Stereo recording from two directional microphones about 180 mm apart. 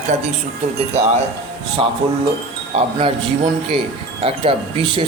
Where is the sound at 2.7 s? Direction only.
30° right (ahead or behind).